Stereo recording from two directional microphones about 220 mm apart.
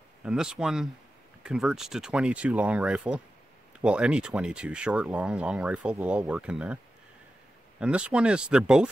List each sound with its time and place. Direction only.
0.2 s speech: 5° right (ahead or behind)
7.8 s speech: 5° right (ahead or behind)